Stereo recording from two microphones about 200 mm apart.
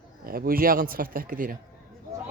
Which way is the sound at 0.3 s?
45° right (ahead or behind).